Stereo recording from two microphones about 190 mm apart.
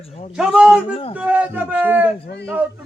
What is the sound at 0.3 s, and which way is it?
A man's voice, 5° right (ahead or behind).